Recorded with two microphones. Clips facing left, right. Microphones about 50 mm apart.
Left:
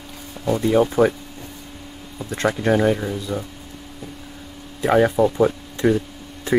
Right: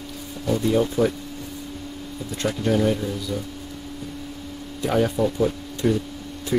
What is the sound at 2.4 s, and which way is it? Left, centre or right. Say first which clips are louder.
Speech: left 3 dB; left.